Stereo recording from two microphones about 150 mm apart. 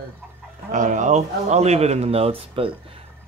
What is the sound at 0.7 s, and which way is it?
Speech, 55° right (ahead or behind).